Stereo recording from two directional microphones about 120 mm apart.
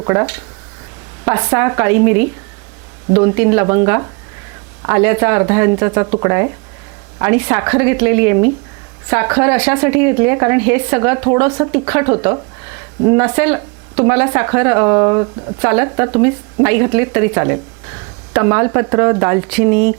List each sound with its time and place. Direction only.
0.0 s speech: 25° right (ahead or behind)